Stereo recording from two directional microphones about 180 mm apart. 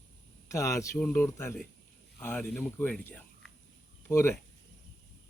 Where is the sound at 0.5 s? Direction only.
15° left (ahead or behind).